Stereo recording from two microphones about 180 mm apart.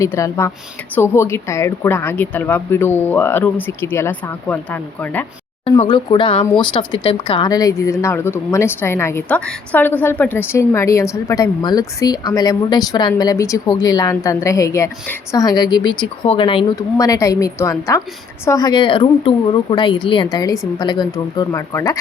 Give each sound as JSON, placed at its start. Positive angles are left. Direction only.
{"t": 0.0, "sound": "speech", "side_deg": 15}
{"t": 5.6, "sound": "speech", "side_deg": 30}